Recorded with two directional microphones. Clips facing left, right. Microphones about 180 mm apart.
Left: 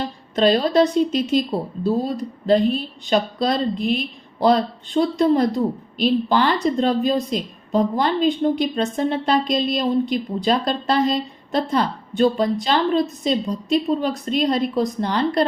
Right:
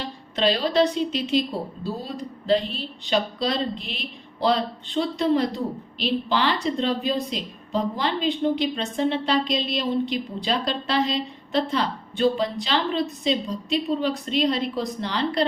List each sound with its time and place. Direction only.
0.3 s a woman's voice: 45° left (ahead or behind)
2.5 s a woman's voice: 45° left (ahead or behind)